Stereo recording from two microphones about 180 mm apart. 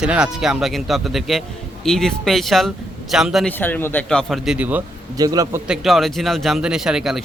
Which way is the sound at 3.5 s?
10° left (ahead or behind).